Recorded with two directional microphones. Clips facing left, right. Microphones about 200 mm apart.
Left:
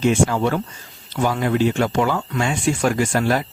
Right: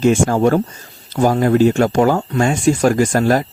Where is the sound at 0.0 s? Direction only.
45° right (ahead or behind).